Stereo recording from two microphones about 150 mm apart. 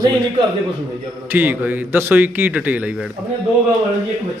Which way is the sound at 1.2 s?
10° right (ahead or behind).